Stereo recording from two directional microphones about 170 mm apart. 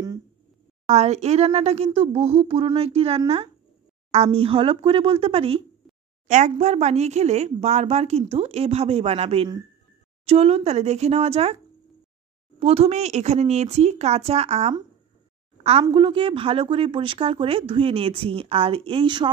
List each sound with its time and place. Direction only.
0.8 s a woman's voice: 40° right (ahead or behind)
6.2 s a woman's voice: 45° right (ahead or behind)
12.5 s a woman's voice: 35° right (ahead or behind)